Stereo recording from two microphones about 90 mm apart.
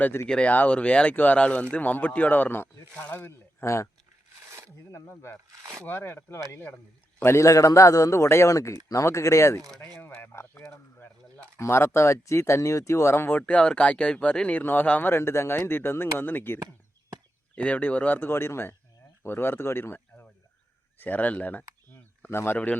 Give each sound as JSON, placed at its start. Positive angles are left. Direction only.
{"t": 0.0, "sound": "speech", "side_deg": 25}
{"t": 0.3, "sound": "speech", "side_deg": 15}
{"t": 3.6, "sound": "speech", "side_deg": 30}
{"t": 4.9, "sound": "speech", "side_deg": 35}
{"t": 5.5, "sound": "speech", "side_deg": -40}
{"t": 5.8, "sound": "speech", "side_deg": 20}
{"t": 10.0, "sound": "speech", "side_deg": 20}
{"t": 11.6, "sound": "speech", "side_deg": 30}
{"t": 13.4, "sound": "speech", "side_deg": 10}
{"t": 22.5, "sound": "speech", "side_deg": 15}